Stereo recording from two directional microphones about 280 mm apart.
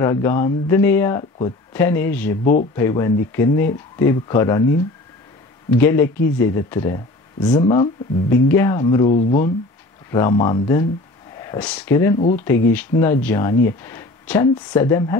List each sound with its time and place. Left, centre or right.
0.0 s speech: centre
9.1 s speech: left
10.1 s speech: centre